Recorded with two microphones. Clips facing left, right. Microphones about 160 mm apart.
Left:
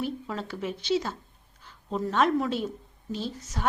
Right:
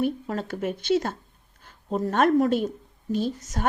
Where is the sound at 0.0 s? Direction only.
50° right (ahead or behind).